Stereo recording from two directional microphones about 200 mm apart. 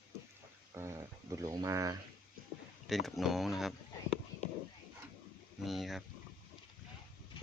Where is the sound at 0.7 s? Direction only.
15° right (ahead or behind).